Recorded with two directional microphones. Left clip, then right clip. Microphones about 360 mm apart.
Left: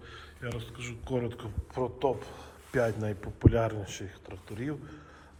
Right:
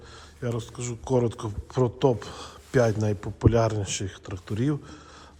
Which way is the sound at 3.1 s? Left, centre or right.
Centre.